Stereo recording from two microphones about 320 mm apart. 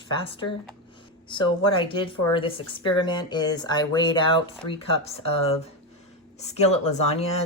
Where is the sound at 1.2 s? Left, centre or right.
Centre.